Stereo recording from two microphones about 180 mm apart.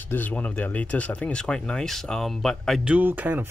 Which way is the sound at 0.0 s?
10° left (ahead or behind).